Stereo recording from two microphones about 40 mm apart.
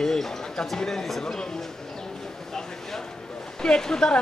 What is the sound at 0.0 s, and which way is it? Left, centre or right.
Speech, centre.